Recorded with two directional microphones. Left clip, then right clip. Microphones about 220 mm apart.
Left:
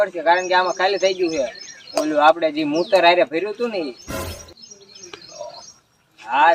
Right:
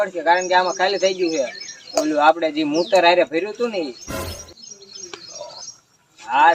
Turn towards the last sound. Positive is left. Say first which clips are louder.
# right 1 dB
turn(degrees=15)  # may be behind; listen again after turning